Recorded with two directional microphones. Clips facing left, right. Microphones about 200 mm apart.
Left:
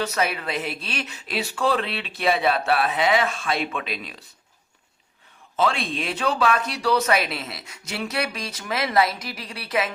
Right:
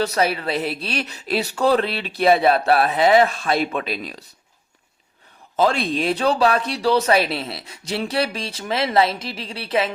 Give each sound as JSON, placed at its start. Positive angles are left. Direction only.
{"t": 0.0, "sound": "speech", "side_deg": -35}
{"t": 5.5, "sound": "speech", "side_deg": -40}